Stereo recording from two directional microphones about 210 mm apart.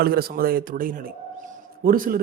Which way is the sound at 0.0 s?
45° right (ahead or behind).